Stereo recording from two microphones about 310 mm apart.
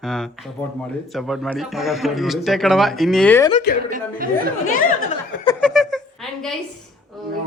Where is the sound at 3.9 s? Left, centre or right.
Right.